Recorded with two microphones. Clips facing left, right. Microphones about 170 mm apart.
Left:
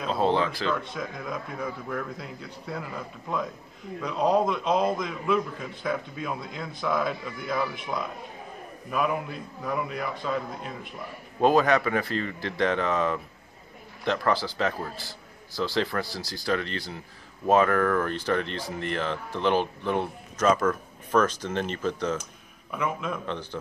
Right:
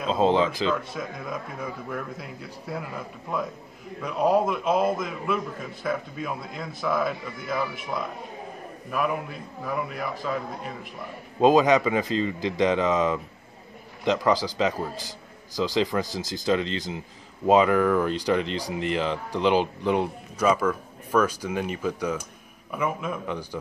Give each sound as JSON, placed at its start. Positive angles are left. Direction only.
{"t": 0.0, "sound": "a man's voice", "side_deg": -15}
{"t": 0.8, "sound": "a man's voice", "side_deg": -5}
{"t": 11.3, "sound": "a man's voice", "side_deg": -15}